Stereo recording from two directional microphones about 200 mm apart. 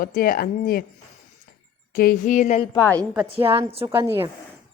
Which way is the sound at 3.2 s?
30° right (ahead or behind).